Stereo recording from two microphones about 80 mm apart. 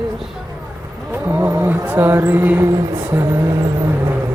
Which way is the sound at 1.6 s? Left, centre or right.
Right.